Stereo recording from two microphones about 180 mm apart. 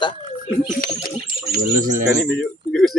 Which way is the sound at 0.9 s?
25° left (ahead or behind).